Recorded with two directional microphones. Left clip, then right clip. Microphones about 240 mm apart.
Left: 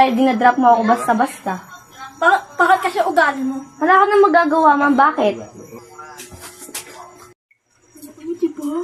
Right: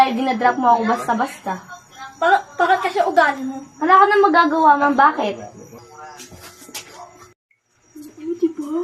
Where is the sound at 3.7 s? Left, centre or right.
Left.